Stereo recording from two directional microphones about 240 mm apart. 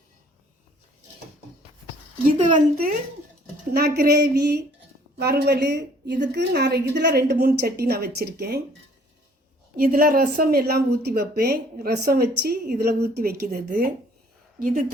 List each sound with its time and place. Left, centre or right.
2.5 s a woman's voice: right
9.7 s speech: right